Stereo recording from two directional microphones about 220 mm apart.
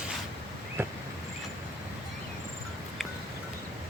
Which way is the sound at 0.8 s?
10° right (ahead or behind).